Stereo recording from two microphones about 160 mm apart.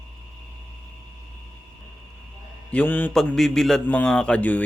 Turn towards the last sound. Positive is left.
turn(degrees=10)  # may be behind; listen again after turning